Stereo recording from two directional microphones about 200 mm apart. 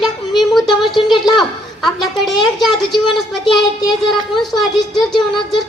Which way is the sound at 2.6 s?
Centre (ahead or behind).